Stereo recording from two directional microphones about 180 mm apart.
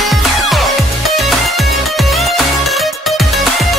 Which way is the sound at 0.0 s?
Centre (ahead or behind).